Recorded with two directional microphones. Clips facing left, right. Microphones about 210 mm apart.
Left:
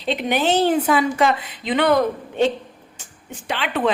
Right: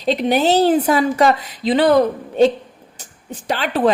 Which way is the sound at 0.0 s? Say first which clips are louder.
Right 5 dB; 40° right (ahead or behind).